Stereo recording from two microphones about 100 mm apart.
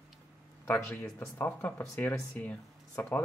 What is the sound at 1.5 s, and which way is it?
Speech, 20° left (ahead or behind).